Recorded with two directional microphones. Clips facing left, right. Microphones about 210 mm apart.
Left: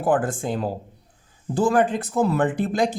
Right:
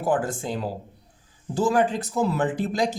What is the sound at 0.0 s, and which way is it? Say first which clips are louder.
Speech: left 3 dB; 55° left (ahead or behind).